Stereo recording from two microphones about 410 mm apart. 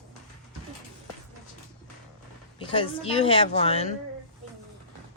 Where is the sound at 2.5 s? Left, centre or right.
Centre.